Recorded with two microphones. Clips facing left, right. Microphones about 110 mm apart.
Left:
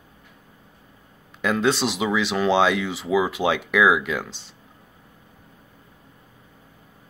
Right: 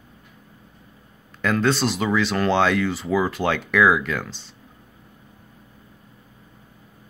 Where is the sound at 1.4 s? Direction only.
5° left (ahead or behind).